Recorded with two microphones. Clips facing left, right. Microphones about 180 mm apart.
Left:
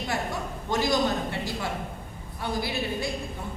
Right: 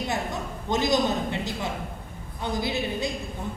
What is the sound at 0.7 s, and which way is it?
A woman's voice, 20° right (ahead or behind).